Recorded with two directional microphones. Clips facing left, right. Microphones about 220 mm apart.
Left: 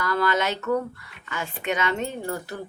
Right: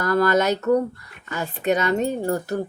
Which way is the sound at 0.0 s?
45° right (ahead or behind).